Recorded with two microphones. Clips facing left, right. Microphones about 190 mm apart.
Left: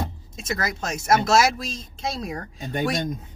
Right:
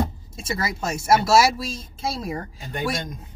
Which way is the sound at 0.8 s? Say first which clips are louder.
Right 2 dB; 5° right (ahead or behind).